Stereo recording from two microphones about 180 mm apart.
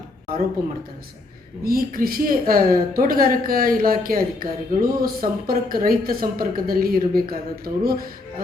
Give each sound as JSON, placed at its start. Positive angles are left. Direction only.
{"t": 1.6, "sound": "speech", "side_deg": -55}